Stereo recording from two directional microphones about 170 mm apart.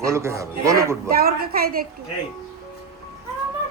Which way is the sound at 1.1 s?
65° right (ahead or behind).